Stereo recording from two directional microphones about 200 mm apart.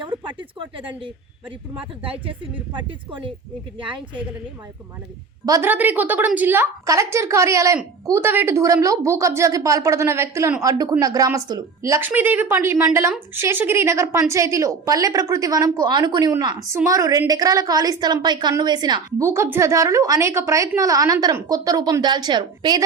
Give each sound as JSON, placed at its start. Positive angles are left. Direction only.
{"t": 0.0, "sound": "a sound", "side_deg": -25}
{"t": 2.7, "sound": "speech", "side_deg": -25}
{"t": 5.5, "sound": "a woman's voice", "side_deg": -15}